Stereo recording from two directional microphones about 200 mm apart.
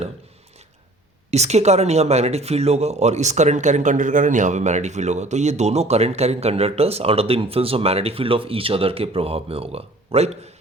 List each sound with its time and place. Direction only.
1.3 s speech: 35° right (ahead or behind)